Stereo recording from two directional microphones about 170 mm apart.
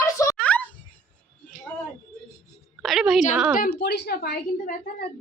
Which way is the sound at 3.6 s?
70° left (ahead or behind).